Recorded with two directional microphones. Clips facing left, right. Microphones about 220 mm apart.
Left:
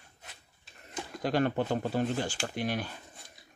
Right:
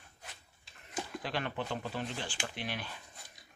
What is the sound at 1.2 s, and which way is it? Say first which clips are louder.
Speech: left 11 dB; 45° left (ahead or behind).